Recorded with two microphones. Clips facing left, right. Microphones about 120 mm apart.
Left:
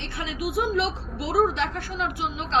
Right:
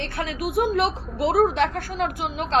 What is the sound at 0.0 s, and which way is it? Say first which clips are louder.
A woman's voice: right 3 dB; 50° right (ahead or behind).